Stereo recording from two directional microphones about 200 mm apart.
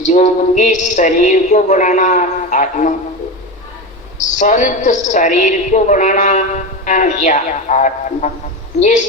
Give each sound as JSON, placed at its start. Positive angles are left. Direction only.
{"t": 0.0, "sound": "a woman's voice", "side_deg": 35}
{"t": 4.4, "sound": "a woman's voice", "side_deg": 40}